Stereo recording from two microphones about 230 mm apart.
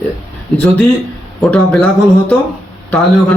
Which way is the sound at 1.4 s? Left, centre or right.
Centre.